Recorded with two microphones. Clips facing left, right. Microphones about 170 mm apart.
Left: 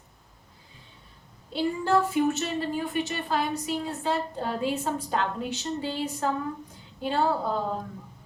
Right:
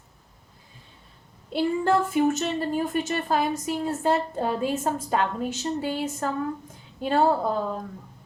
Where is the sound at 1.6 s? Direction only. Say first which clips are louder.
Right 2 dB; 55° right (ahead or behind).